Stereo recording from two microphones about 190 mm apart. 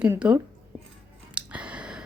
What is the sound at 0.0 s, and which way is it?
Speech, 5° right (ahead or behind).